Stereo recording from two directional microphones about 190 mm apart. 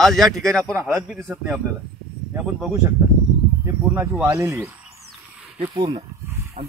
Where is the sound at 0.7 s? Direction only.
10° right (ahead or behind).